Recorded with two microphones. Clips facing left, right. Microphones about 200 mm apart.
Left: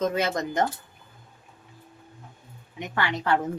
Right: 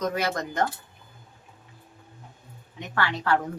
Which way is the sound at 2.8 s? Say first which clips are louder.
Even; 15° left (ahead or behind).